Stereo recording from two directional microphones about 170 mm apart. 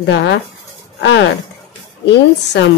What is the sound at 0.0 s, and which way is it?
A woman's voice, 90° left.